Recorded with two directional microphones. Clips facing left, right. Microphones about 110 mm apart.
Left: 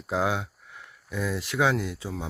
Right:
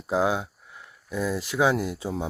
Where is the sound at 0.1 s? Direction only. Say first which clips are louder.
Right 3 dB; 5° right (ahead or behind).